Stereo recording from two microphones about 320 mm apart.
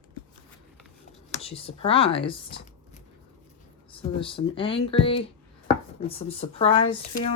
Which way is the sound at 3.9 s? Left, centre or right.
Centre.